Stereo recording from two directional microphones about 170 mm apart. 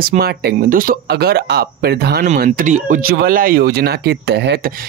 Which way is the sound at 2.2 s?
50° right (ahead or behind).